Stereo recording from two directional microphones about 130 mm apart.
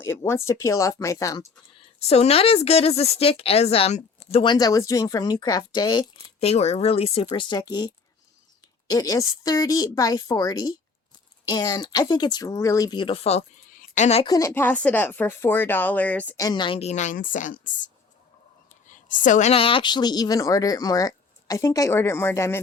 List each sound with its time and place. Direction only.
0.0 s speech: 20° left (ahead or behind)
2.0 s speech: 50° left (ahead or behind)
4.4 s speech: 30° left (ahead or behind)
6.4 s speech: 55° left (ahead or behind)
7.3 s speech: 35° left (ahead or behind); by 13.4 s 50° left (ahead or behind)
13.7 s a sound: 70° left (ahead or behind)
14.3 s speech: 25° left (ahead or behind)
16.4 s speech: 35° left (ahead or behind)
16.9 s a woman's voice: 70° left (ahead or behind)
19.5 s speech: 45° left (ahead or behind); by 22.6 s 20° left (ahead or behind)